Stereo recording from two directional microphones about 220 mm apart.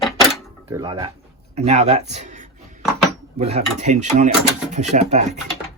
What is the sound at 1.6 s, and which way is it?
A man's voice, 30° right (ahead or behind).